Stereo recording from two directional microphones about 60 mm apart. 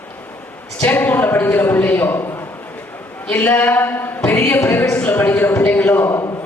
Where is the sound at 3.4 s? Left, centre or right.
Left.